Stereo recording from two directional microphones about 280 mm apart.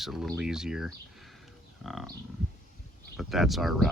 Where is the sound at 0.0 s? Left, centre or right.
Centre.